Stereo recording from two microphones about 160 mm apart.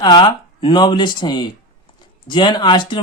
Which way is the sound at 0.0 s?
30° left (ahead or behind).